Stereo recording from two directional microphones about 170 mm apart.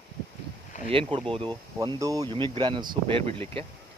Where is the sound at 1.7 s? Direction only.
20° right (ahead or behind).